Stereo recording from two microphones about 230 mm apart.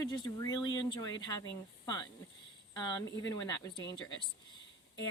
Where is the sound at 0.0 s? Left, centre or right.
Centre.